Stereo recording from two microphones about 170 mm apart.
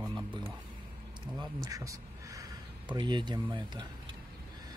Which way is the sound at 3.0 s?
25° right (ahead or behind).